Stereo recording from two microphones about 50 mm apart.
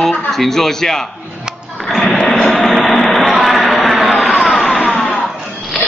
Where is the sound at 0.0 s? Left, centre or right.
Centre.